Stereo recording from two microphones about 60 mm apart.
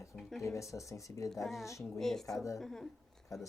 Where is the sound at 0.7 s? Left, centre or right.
Left.